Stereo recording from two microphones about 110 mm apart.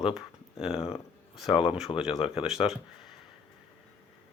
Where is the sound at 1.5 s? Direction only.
55° left (ahead or behind).